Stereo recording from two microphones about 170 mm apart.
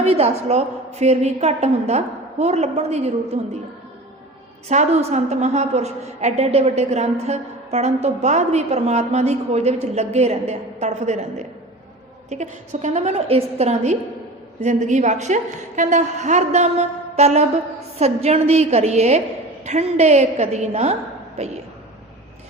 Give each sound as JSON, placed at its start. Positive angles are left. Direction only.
{"t": 0.0, "sound": "a woman's voice", "side_deg": -40}
{"t": 4.7, "sound": "a woman's voice", "side_deg": -40}